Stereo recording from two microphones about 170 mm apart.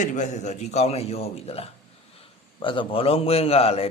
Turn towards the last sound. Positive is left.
turn(degrees=35)  # may be behind; listen again after turning